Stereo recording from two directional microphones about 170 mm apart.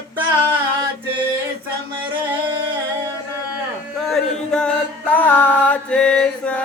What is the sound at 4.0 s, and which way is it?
Music, 5° left (ahead or behind).